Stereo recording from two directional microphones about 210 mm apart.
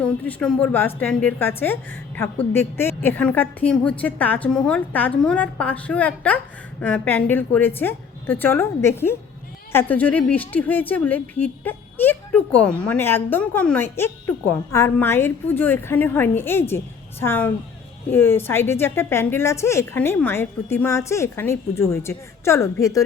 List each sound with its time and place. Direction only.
0.0 s a woman's voice: 5° left (ahead or behind)